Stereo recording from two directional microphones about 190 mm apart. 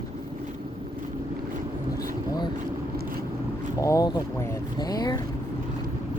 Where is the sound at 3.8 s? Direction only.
15° left (ahead or behind).